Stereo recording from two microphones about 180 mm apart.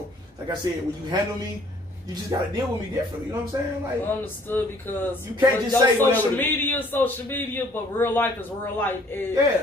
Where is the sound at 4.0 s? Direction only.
10° left (ahead or behind).